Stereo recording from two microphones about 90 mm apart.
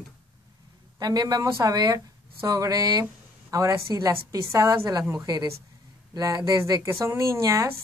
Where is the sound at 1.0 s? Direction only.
45° right (ahead or behind).